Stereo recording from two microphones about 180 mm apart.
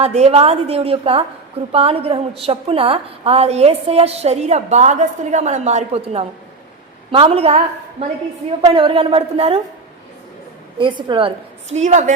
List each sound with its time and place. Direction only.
0.0 s a woman's voice: 35° right (ahead or behind)
10.8 s a woman's voice: 25° right (ahead or behind)
11.7 s a woman's voice: 40° right (ahead or behind)